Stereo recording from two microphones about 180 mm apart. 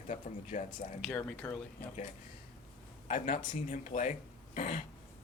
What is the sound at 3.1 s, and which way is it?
Speech, 45° left (ahead or behind).